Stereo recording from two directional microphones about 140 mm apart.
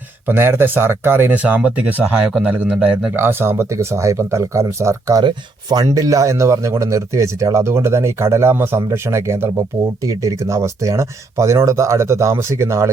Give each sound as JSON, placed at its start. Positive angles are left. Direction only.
{"t": 0.3, "sound": "speech", "side_deg": -15}